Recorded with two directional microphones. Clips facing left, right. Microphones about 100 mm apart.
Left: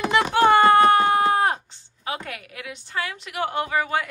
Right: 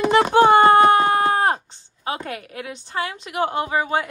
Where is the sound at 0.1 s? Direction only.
40° right (ahead or behind).